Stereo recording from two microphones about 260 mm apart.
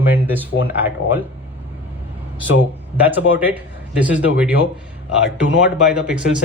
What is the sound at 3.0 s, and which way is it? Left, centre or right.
A man's voice, centre.